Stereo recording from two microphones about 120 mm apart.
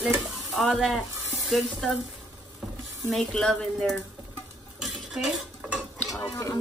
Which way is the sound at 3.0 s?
5° left (ahead or behind).